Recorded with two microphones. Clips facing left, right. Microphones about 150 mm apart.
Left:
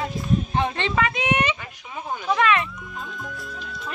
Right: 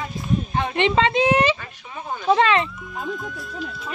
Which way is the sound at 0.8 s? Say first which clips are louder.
Right 6 dB; 20° right (ahead or behind).